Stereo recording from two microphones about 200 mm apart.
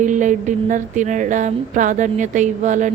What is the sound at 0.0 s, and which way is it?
Speech, 40° right (ahead or behind).